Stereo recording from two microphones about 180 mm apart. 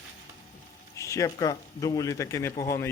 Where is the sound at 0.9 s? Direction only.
15° left (ahead or behind).